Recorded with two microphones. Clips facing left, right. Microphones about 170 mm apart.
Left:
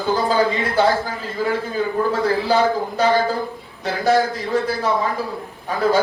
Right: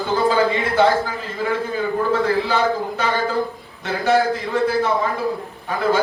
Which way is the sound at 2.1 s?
40° left (ahead or behind).